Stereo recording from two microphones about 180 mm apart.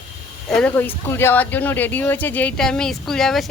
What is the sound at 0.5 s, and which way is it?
Speech, 10° left (ahead or behind).